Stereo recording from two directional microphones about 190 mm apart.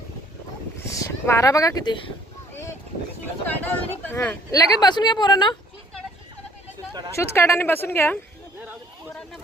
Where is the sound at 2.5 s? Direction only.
15° left (ahead or behind).